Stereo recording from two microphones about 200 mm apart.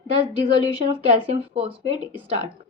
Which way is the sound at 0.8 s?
30° right (ahead or behind).